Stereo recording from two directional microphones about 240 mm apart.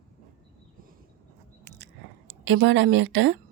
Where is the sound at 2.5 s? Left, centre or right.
Right.